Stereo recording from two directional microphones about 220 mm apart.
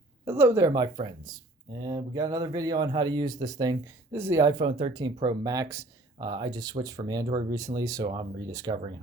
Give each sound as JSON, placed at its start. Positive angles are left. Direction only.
{"t": 0.3, "sound": "speech", "side_deg": -10}